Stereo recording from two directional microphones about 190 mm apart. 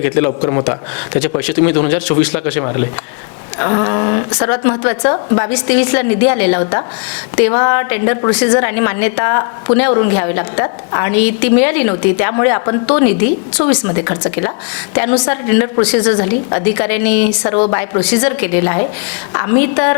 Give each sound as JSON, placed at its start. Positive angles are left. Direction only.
{"t": 0.0, "sound": "a woman's voice", "side_deg": 15}
{"t": 0.4, "sound": "a woman's voice", "side_deg": 25}
{"t": 1.4, "sound": "a woman's voice", "side_deg": 10}
{"t": 17.4, "sound": "a woman's voice", "side_deg": 20}